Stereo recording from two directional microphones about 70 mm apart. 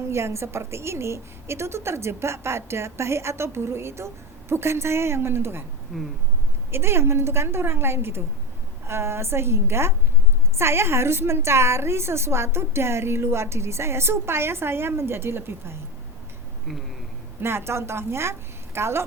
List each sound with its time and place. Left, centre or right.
0.1 s a woman's voice: right
5.9 s a sound: centre
6.7 s a woman's voice: right
17.4 s a woman's voice: right